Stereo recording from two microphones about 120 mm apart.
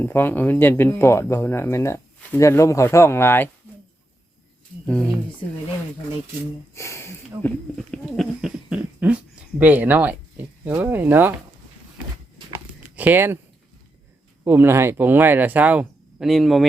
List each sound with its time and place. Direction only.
0.0 s speech: 15° left (ahead or behind)
6.7 s a sound: 25° left (ahead or behind)
7.9 s a sound: centre (ahead or behind); by 10.4 s 15° right (ahead or behind)
10.7 s speech: 15° right (ahead or behind)
13.0 s speech: 15° right (ahead or behind)
14.4 s speech: 15° right (ahead or behind)
16.3 s speech: centre (ahead or behind)